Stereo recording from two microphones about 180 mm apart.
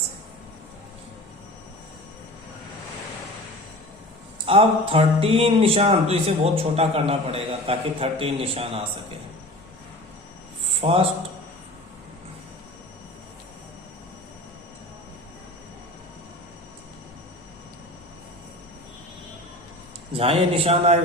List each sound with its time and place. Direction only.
4.4 s speech: 30° right (ahead or behind)
10.8 s a man's voice: 35° right (ahead or behind)
20.1 s speech: 35° right (ahead or behind)